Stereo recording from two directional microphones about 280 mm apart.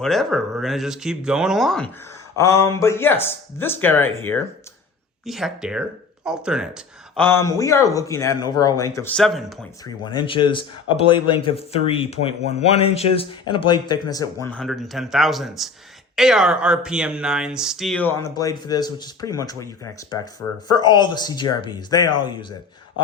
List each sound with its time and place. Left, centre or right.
0.0 s speech: centre
7.3 s speech: centre
9.8 s speech: centre
14.4 s speech: centre